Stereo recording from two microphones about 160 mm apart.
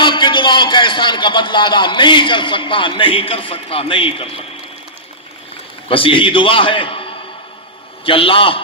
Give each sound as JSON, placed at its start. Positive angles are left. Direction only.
{"t": 0.0, "sound": "a man's voice", "side_deg": 30}
{"t": 5.9, "sound": "a man's voice", "side_deg": 35}